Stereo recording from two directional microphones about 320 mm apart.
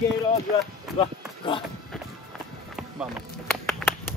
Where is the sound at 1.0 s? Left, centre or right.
Centre.